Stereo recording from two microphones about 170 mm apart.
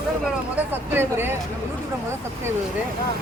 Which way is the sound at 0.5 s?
10° right (ahead or behind).